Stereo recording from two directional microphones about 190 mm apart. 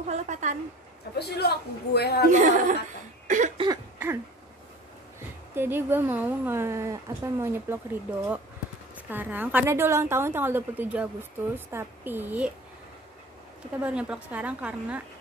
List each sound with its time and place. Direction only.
0.0 s a woman's voice: 40° right (ahead or behind)
1.1 s a man's voice: 60° left (ahead or behind)
2.3 s a woman's voice: 40° right (ahead or behind)
3.3 s cough: 40° right (ahead or behind)
3.5 s throat clearing: 20° right (ahead or behind)
5.5 s a woman's voice: 10° right (ahead or behind)
13.7 s a woman's voice: 5° right (ahead or behind)